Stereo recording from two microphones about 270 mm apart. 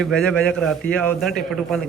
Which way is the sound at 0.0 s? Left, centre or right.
Centre.